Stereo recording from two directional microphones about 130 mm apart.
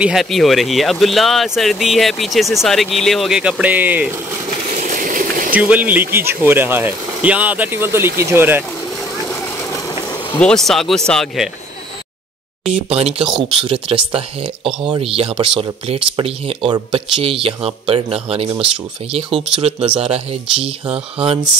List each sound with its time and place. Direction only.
0.0 s speech: centre (ahead or behind)
4.6 s a sound: 85° right
5.5 s speech: 10° right (ahead or behind)
9.3 s vehicle: 25° left (ahead or behind)
9.9 s a sound: 35° left (ahead or behind)
10.4 s speech: 5° left (ahead or behind)
12.7 s speech: 50° right (ahead or behind)
19.3 s speech: 5° right (ahead or behind)
20.0 s speech: 50° right (ahead or behind)